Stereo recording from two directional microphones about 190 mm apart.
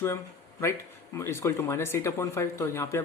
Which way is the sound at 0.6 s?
15° left (ahead or behind).